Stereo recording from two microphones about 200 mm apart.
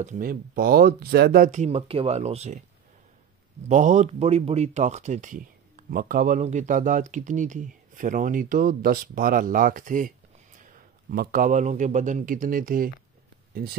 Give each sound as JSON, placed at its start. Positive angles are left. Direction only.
{"t": 0.0, "sound": "speech", "side_deg": -40}
{"t": 3.6, "sound": "speech", "side_deg": -35}